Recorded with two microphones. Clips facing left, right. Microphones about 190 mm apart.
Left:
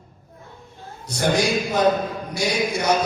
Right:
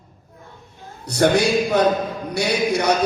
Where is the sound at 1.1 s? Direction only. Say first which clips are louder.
Right 4 dB; 65° right (ahead or behind).